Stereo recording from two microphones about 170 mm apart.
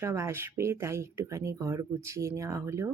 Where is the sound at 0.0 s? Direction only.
15° right (ahead or behind).